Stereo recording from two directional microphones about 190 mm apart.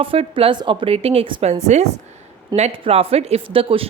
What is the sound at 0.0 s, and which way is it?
A woman's voice, 30° right (ahead or behind).